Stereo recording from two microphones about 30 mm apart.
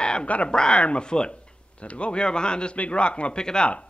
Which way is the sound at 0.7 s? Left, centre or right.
Left.